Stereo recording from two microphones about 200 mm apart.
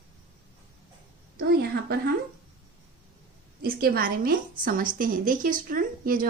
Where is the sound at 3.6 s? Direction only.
50° right (ahead or behind).